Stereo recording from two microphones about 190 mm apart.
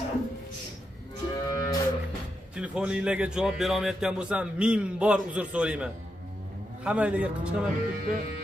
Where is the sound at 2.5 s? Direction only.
5° right (ahead or behind).